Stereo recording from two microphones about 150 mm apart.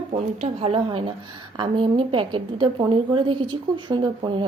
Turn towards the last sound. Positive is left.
turn(degrees=-30)  # may be behind; listen again after turning